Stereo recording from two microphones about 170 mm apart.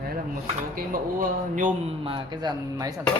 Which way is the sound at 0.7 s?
55° right (ahead or behind).